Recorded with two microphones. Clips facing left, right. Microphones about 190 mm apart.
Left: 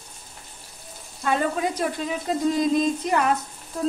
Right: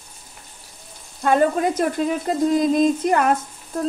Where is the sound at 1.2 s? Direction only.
50° right (ahead or behind).